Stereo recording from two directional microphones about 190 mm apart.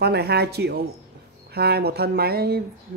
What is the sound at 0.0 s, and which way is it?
Speech, 60° right (ahead or behind).